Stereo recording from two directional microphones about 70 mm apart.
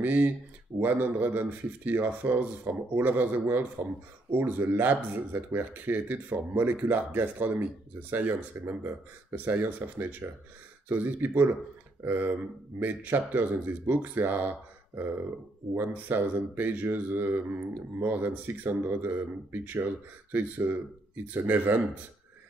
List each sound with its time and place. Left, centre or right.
0.0 s speech: right
15.7 s speech: right